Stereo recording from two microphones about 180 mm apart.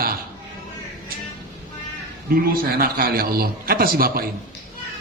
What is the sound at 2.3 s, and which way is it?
A woman's voice, 55° right (ahead or behind).